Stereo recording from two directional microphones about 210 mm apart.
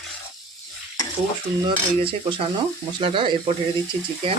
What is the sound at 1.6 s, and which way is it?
Speech, 25° right (ahead or behind).